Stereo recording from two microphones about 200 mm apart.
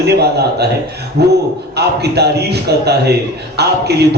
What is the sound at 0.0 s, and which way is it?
A man's voice, 55° right (ahead or behind).